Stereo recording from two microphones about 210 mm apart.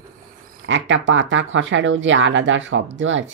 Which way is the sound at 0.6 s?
65° right (ahead or behind).